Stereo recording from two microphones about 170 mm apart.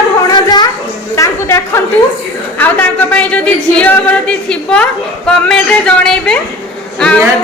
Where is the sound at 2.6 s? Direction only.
10° left (ahead or behind).